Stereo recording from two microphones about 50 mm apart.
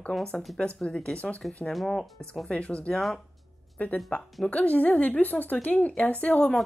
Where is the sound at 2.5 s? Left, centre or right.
Left.